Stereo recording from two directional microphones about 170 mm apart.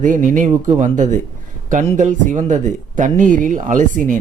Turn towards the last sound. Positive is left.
turn(degrees=-50)  # may be behind; listen again after turning